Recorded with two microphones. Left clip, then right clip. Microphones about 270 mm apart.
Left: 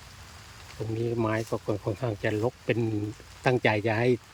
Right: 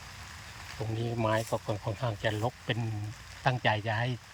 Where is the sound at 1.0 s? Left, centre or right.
Centre.